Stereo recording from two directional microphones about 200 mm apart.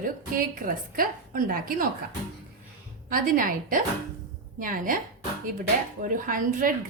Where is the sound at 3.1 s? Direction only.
45° right (ahead or behind).